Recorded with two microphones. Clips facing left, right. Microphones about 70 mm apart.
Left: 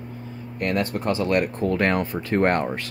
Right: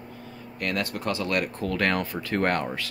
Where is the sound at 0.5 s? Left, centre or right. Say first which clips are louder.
Left 5 dB; left.